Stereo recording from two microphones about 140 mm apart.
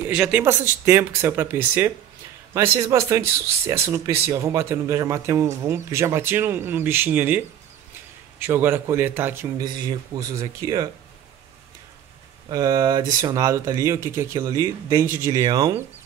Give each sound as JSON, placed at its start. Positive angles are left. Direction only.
{"t": 0.0, "sound": "speech", "side_deg": -10}
{"t": 9.6, "sound": "speech", "side_deg": -30}
{"t": 12.4, "sound": "speech", "side_deg": -25}